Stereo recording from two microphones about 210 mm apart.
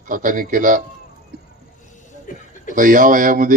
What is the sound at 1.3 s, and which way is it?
Vehicle, 50° right (ahead or behind).